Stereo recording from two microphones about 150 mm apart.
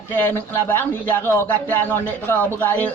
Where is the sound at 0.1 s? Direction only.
15° left (ahead or behind).